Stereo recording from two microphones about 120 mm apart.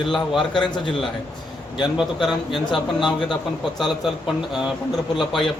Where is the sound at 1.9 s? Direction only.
Centre (ahead or behind).